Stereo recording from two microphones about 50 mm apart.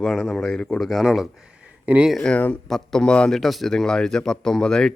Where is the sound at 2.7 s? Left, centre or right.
Centre.